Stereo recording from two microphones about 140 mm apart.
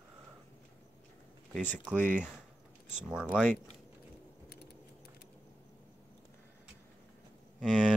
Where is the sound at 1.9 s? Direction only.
10° left (ahead or behind).